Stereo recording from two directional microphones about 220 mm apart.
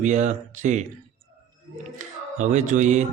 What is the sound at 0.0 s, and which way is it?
Speech, 35° right (ahead or behind).